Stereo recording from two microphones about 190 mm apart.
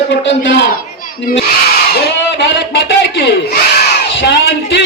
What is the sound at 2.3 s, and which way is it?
A man's voice, 65° left (ahead or behind).